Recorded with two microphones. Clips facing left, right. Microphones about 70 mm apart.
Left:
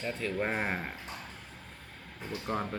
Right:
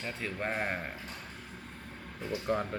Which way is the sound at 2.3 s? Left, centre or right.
Centre.